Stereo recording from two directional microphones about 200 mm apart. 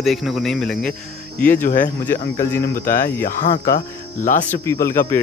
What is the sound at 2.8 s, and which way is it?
Speech, 45° left (ahead or behind).